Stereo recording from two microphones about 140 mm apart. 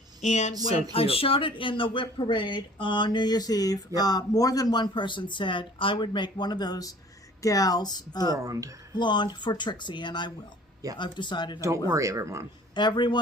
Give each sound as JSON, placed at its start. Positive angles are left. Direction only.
{"t": 0.2, "sound": "speech", "side_deg": 55}
{"t": 0.9, "sound": "speech", "side_deg": 40}
{"t": 8.4, "sound": "speech", "side_deg": -25}
{"t": 9.0, "sound": "speech", "side_deg": 35}
{"t": 11.9, "sound": "speech", "side_deg": -20}
{"t": 12.7, "sound": "speech", "side_deg": 35}